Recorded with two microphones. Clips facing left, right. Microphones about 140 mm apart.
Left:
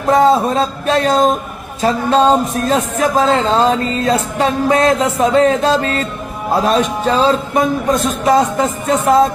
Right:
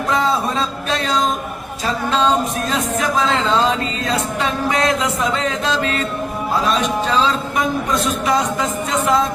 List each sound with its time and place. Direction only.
0.1 s speech: 40° left (ahead or behind)